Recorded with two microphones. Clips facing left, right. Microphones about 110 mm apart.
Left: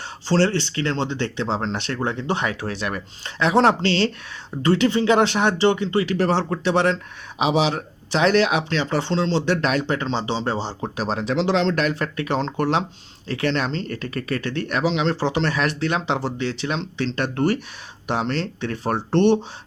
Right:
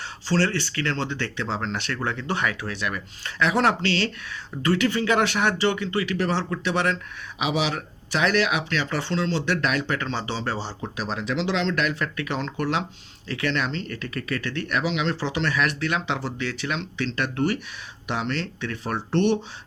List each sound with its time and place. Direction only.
0.3 s speech: 25° left (ahead or behind)
10.8 s speech: 35° left (ahead or behind)